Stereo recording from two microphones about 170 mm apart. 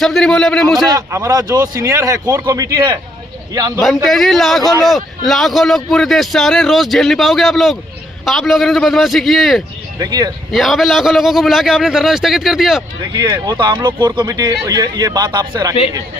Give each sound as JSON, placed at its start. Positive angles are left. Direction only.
{"t": 0.0, "sound": "a man's voice", "side_deg": 0}
{"t": 0.9, "sound": "speech", "side_deg": -20}
{"t": 3.8, "sound": "a man's voice", "side_deg": 0}
{"t": 10.0, "sound": "speech", "side_deg": -20}
{"t": 10.5, "sound": "a man's voice", "side_deg": 0}
{"t": 13.0, "sound": "speech", "side_deg": -25}